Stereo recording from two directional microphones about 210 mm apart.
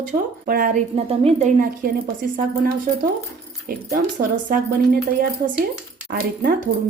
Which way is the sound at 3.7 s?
40° right (ahead or behind).